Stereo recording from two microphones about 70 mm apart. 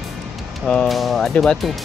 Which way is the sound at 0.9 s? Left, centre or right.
Centre.